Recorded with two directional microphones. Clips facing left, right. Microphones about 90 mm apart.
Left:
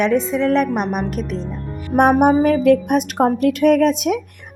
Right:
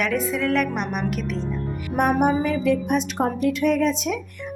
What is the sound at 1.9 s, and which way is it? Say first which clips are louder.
A woman's voice: left 7 dB; 70° left (ahead or behind).